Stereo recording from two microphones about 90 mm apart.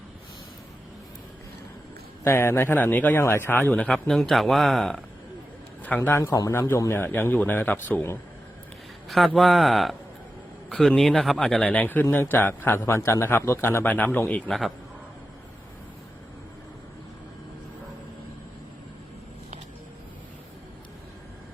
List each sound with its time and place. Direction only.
2.2 s a man's voice: 30° left (ahead or behind)
3.8 s speech: 5° left (ahead or behind)
6.0 s a man's voice: 30° left (ahead or behind)
9.0 s a man's voice: centre (ahead or behind); by 12.0 s 15° left (ahead or behind)
12.0 s a man's voice: 30° left (ahead or behind)